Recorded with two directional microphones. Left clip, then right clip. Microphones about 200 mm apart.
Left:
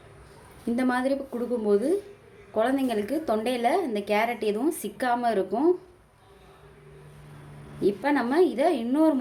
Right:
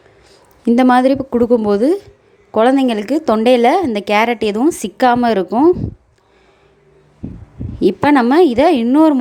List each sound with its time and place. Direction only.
0.8 s a woman's voice: 45° right (ahead or behind)
7.8 s a woman's voice: 45° right (ahead or behind)